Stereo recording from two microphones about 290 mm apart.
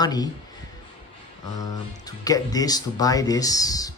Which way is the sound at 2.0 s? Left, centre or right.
Centre.